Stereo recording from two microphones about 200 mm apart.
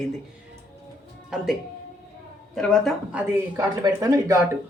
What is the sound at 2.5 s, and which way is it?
Speech, centre (ahead or behind).